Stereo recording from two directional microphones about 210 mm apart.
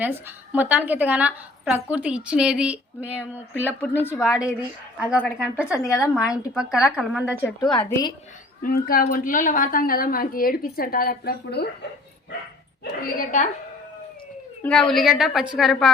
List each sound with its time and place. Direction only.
0.5 s a woman's voice: 5° right (ahead or behind)
3.8 s a woman's voice: 10° left (ahead or behind)
4.2 s a woman's voice: centre (ahead or behind)
5.9 s a woman's voice: 15° left (ahead or behind)
6.5 s a woman's voice: 5° right (ahead or behind)
7.6 s a woman's voice: 20° left (ahead or behind)
8.6 s a woman's voice: 45° left (ahead or behind)
14.6 s a woman's voice: 5° left (ahead or behind)